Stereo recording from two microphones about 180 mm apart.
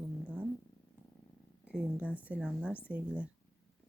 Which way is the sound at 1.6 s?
5° right (ahead or behind).